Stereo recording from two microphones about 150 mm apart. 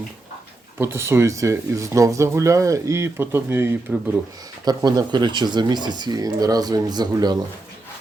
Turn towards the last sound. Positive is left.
turn(degrees=-25)  # may be behind; listen again after turning